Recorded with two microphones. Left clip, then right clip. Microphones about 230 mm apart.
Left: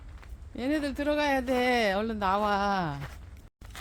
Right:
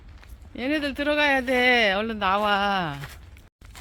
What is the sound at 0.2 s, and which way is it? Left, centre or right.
Speech, centre.